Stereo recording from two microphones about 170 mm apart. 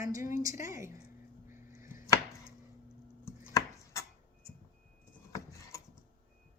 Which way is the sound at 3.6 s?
20° left (ahead or behind).